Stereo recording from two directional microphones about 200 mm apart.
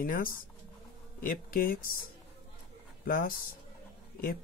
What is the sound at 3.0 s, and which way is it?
Speech, 45° left (ahead or behind).